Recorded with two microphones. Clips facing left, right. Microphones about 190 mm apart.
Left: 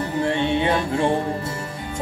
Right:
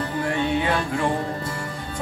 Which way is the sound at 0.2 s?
25° left (ahead or behind).